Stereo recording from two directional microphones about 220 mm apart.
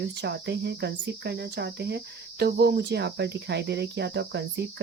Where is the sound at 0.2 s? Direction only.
50° right (ahead or behind).